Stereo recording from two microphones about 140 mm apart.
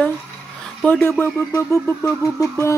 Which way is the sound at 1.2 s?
15° left (ahead or behind).